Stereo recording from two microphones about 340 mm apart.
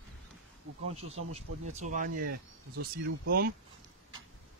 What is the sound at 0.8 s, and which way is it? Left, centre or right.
Speech, centre.